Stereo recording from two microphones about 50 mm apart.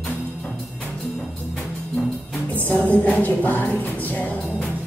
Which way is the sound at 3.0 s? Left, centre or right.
Left.